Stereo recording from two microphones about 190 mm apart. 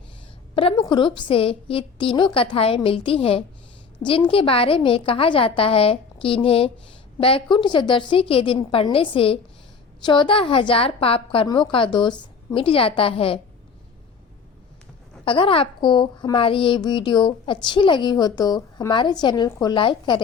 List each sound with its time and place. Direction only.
0.5 s a child's voice: 30° left (ahead or behind)
15.2 s a child's voice: 30° left (ahead or behind)